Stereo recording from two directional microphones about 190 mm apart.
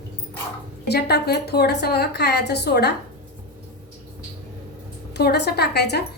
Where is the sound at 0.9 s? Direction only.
60° left (ahead or behind).